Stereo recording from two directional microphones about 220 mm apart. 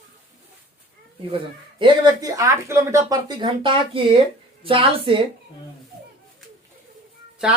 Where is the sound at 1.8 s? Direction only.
20° right (ahead or behind).